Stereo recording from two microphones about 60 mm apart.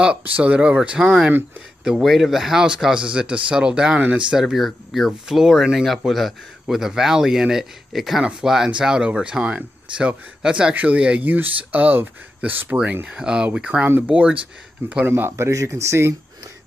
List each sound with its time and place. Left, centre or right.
0.2 s speech: right; by 8.2 s centre
8.2 s speech: centre
11.2 s speech: right
13.0 s speech: centre
15.0 s speech: right
15.5 s speech: right